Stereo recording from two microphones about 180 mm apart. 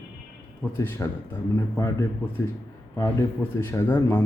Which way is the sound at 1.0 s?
15° left (ahead or behind).